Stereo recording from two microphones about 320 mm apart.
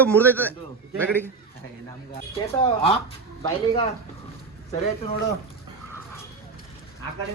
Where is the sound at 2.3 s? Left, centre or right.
Centre.